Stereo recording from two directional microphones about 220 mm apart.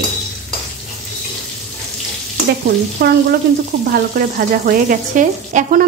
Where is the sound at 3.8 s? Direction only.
45° right (ahead or behind).